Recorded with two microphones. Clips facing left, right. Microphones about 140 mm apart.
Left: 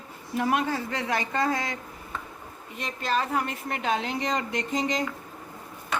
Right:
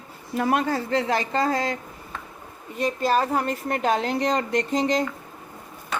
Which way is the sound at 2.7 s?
40° right (ahead or behind).